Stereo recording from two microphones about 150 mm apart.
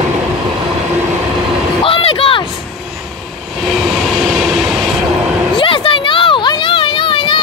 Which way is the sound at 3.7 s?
Centre (ahead or behind).